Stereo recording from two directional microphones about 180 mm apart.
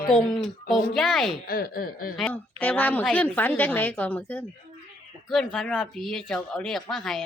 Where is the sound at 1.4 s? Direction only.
55° left (ahead or behind).